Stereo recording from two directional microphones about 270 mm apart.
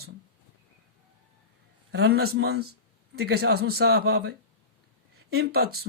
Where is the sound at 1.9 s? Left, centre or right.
Right.